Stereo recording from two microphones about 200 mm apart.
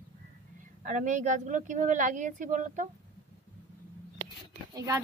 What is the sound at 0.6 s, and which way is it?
A woman's voice, 40° right (ahead or behind).